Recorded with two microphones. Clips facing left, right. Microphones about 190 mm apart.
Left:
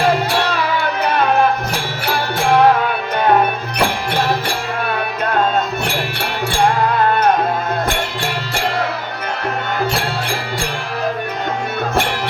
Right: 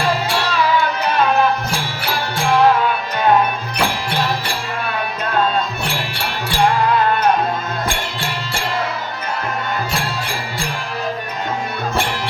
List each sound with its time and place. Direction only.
0.4 s music: 60° left (ahead or behind)
3.8 s music: 55° left (ahead or behind)
5.8 s music: 60° left (ahead or behind)